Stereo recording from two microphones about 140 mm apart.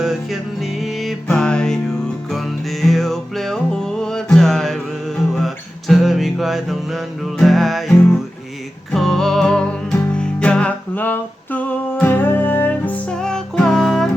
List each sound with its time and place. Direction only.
0.0 s music: 5° right (ahead or behind)
5.9 s music: centre (ahead or behind)